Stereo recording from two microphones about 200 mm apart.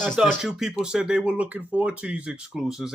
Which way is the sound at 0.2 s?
5° right (ahead or behind).